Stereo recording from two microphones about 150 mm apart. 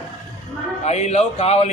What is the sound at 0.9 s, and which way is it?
Speech, 50° left (ahead or behind).